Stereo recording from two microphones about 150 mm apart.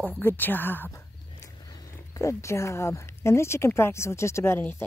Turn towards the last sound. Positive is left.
turn(degrees=15)  # may be behind; listen again after turning